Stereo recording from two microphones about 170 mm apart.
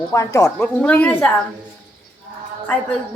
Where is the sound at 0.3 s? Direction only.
20° left (ahead or behind).